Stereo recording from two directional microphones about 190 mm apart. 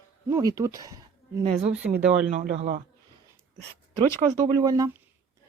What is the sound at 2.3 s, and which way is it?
Speech, 35° right (ahead or behind).